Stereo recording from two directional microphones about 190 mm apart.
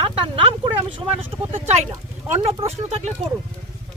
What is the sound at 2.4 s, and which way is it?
Speech, 30° right (ahead or behind).